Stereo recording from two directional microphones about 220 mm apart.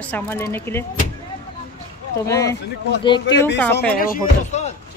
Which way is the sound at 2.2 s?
15° left (ahead or behind).